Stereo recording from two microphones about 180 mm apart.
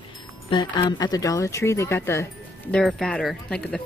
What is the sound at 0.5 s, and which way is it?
Speech, 25° left (ahead or behind).